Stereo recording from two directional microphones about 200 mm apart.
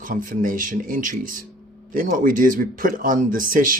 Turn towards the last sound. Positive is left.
turn(degrees=-45)  # may be behind; listen again after turning